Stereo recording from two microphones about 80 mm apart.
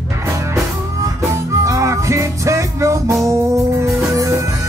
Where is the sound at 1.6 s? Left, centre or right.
Right.